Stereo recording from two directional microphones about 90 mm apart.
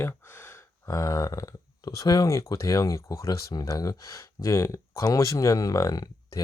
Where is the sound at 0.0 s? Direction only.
25° left (ahead or behind).